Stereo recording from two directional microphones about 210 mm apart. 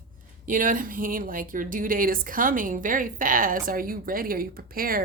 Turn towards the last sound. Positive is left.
turn(degrees=-45)  # may be behind; listen again after turning